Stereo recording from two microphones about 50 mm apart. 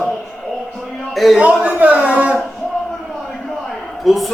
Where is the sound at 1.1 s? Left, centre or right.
Centre.